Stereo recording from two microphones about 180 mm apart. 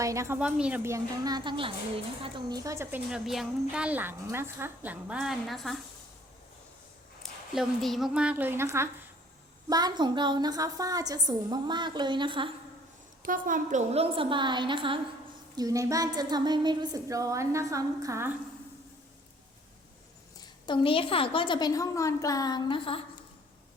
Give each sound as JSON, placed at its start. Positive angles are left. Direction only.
{"t": 0.0, "sound": "a woman's voice", "side_deg": -15}
{"t": 7.2, "sound": "a woman's voice", "side_deg": 0}
{"t": 13.2, "sound": "speech", "side_deg": -50}
{"t": 20.4, "sound": "a woman's voice", "side_deg": 25}